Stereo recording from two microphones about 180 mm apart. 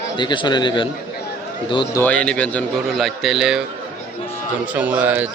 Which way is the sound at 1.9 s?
10° left (ahead or behind).